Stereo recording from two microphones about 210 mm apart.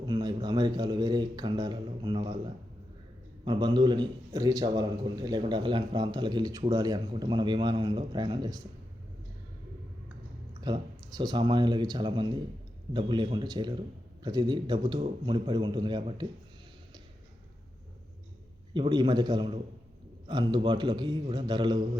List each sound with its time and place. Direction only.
0.0 s a man's voice: 20° right (ahead or behind)
3.4 s a man's voice: 20° right (ahead or behind)
10.6 s a man's voice: 20° right (ahead or behind)
18.7 s a man's voice: 20° right (ahead or behind)